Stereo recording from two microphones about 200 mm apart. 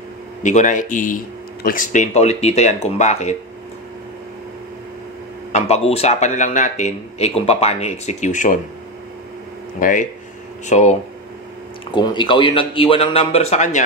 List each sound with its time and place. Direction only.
0.4 s a man's voice: 35° left (ahead or behind)
5.5 s a man's voice: 30° left (ahead or behind)
9.8 s a man's voice: 45° left (ahead or behind)
11.9 s speech: 25° left (ahead or behind)